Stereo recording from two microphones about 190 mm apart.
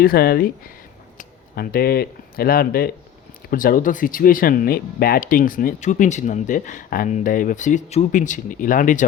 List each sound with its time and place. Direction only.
0.0 s speech: 50° left (ahead or behind)